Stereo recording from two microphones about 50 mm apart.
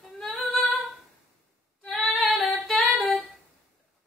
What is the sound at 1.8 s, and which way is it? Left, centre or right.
Female singing, left.